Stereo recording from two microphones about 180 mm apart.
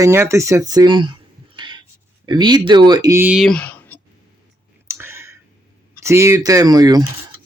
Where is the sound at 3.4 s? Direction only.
5° left (ahead or behind).